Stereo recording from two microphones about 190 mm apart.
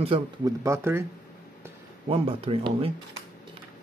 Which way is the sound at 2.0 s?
30° right (ahead or behind).